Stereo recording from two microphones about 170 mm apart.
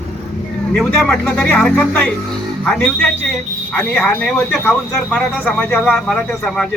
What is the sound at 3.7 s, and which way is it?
A man's voice, 5° left (ahead or behind).